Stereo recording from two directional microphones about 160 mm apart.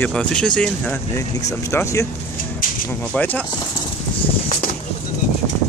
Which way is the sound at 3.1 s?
10° left (ahead or behind).